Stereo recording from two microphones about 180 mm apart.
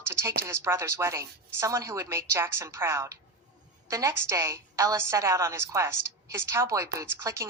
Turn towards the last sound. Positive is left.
turn(degrees=-15)  # may be behind; listen again after turning